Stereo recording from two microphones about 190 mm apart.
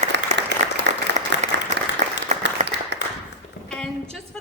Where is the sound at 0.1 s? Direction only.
65° right (ahead or behind).